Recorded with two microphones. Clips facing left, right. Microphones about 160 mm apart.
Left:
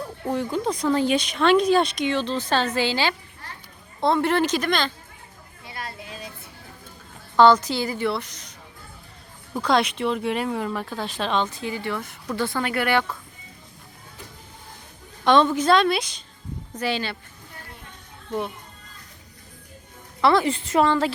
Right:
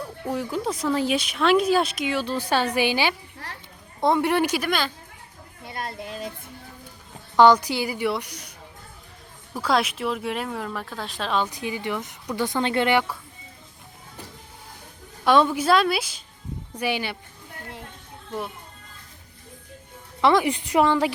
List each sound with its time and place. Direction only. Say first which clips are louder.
0.3 s speech: left 2 dB; 5° right (ahead or behind)
7.3 s speech: even; 15° right (ahead or behind)
9.6 s speech: left 2 dB; 5° right (ahead or behind)
11.4 s speech: even; 15° right (ahead or behind)
15.2 s speech: left 1 dB; 10° right (ahead or behind)
18.3 s a child's voice: left 4 dB; centre (ahead or behind)
20.2 s speech: even; 15° right (ahead or behind)